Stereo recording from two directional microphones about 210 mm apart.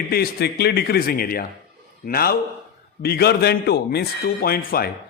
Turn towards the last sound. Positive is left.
turn(degrees=45)  # may be behind; listen again after turning